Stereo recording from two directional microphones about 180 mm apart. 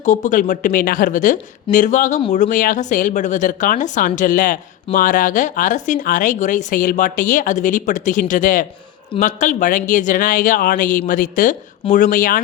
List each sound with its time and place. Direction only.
0.0 s a woman's voice: 40° left (ahead or behind)